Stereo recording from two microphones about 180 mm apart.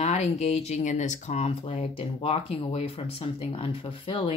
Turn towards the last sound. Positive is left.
turn(degrees=30)  # may be behind; listen again after turning